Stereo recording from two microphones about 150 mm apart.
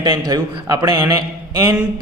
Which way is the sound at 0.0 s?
30° right (ahead or behind).